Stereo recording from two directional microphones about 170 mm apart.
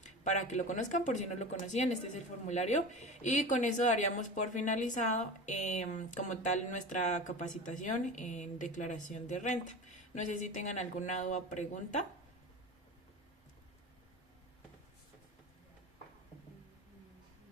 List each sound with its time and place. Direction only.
0.0 s speech: 45° left (ahead or behind)